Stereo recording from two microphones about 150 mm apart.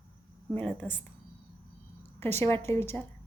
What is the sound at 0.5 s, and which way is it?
Speech, 10° left (ahead or behind).